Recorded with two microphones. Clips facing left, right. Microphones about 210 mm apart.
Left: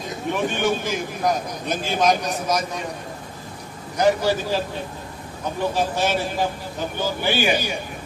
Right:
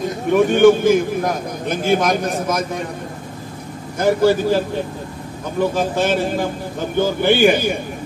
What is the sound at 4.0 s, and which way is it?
Speech, 55° right (ahead or behind).